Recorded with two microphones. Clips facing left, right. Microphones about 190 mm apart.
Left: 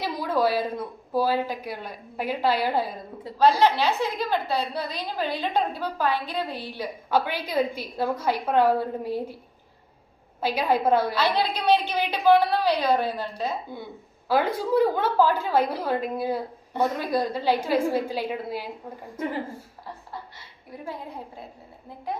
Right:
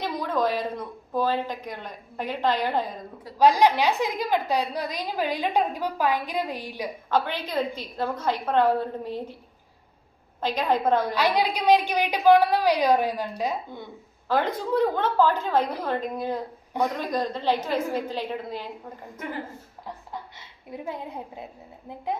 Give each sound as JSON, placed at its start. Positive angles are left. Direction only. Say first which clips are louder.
{"t": 0.0, "sound": "a woman's voice", "louder": "left 1 dB", "side_deg": 10}
{"t": 3.3, "sound": "a woman's voice", "louder": "right 1 dB", "side_deg": -15}
{"t": 7.1, "sound": "a woman's voice", "louder": "left 1 dB", "side_deg": 10}
{"t": 10.4, "sound": "a woman's voice", "louder": "left 1 dB", "side_deg": 10}
{"t": 11.1, "sound": "a woman's voice", "louder": "right 1 dB", "side_deg": -15}
{"t": 14.3, "sound": "a woman's voice", "louder": "left 2 dB", "side_deg": 10}
{"t": 20.7, "sound": "a woman's voice", "louder": "right 2 dB", "side_deg": -20}